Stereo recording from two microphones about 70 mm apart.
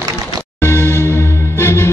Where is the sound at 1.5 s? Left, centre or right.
Left.